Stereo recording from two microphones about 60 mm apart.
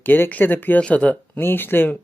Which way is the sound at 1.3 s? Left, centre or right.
Left.